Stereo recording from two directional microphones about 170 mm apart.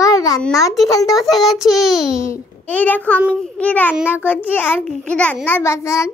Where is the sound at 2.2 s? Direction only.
15° left (ahead or behind).